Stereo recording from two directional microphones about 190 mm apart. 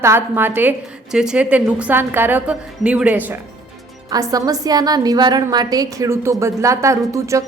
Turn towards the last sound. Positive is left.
turn(degrees=-15)  # may be behind; listen again after turning